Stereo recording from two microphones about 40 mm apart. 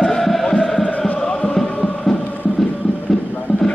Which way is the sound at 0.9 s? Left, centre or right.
Left.